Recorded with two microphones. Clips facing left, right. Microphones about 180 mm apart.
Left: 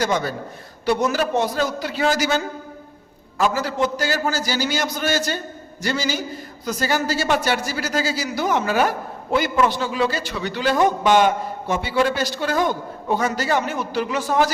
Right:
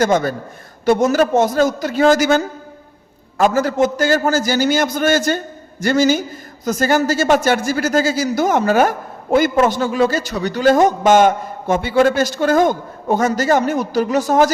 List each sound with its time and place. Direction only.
0.0 s a man's voice: 50° right (ahead or behind)